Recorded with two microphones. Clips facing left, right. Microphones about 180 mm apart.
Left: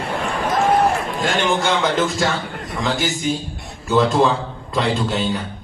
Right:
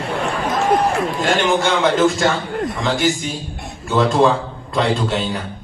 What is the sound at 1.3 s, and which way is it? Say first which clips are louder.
A man's voice: right 1 dB; centre (ahead or behind).